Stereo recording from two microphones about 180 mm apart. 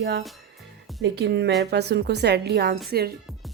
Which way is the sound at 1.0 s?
70° right (ahead or behind).